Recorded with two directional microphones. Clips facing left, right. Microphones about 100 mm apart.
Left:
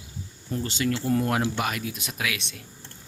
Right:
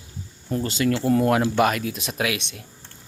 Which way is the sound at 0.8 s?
90° right.